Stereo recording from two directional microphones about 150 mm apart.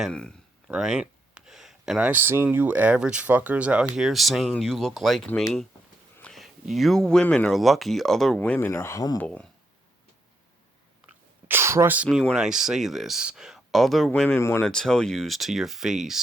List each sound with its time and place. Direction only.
0.0 s speech: 5° left (ahead or behind)
8.4 s speech: 15° left (ahead or behind)
9.1 s speech: 10° left (ahead or behind)
11.4 s a sound: 15° right (ahead or behind)
12.0 s speech: centre (ahead or behind)